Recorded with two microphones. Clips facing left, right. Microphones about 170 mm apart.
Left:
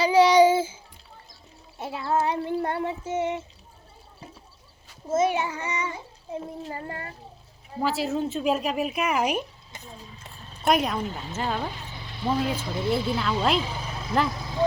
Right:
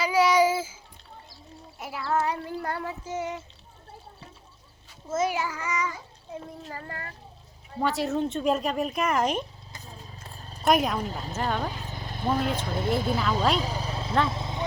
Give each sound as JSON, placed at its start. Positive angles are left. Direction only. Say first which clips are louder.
{"t": 0.0, "sound": "child singing", "louder": "left 5 dB", "side_deg": 30}
{"t": 1.8, "sound": "child singing", "louder": "left 2 dB", "side_deg": 25}
{"t": 5.0, "sound": "child singing", "louder": "left 4 dB", "side_deg": 25}
{"t": 7.8, "sound": "speech", "louder": "even", "side_deg": 5}
{"t": 10.2, "sound": "purr", "louder": "right 1 dB", "side_deg": -40}
{"t": 10.6, "sound": "speech", "louder": "even", "side_deg": 0}
{"t": 11.0, "sound": "speech", "louder": "left 1 dB", "side_deg": -40}
{"t": 11.3, "sound": "speech", "louder": "even", "side_deg": 5}
{"t": 11.9, "sound": "a sound", "louder": "left 1 dB", "side_deg": -45}
{"t": 12.7, "sound": "speech", "louder": "left 1 dB", "side_deg": -50}
{"t": 13.6, "sound": "vehicle", "louder": "right 1 dB", "side_deg": -40}